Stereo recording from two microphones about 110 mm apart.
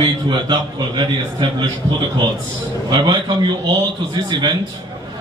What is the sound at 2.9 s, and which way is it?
Speech, 45° right (ahead or behind).